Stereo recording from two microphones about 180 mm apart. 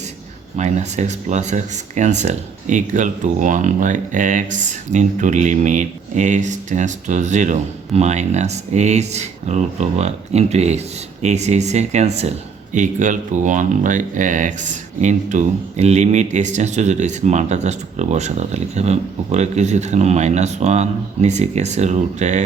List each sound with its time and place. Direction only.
0.5 s speech: 40° right (ahead or behind)